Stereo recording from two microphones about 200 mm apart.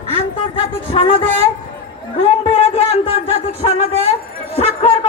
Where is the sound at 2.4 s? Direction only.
30° left (ahead or behind).